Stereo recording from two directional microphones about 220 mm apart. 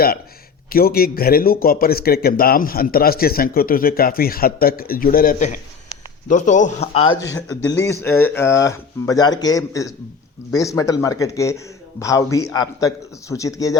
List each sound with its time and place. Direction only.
0.7 s speech: 40° left (ahead or behind); by 7.2 s 25° left (ahead or behind)
7.2 s speech: 15° left (ahead or behind)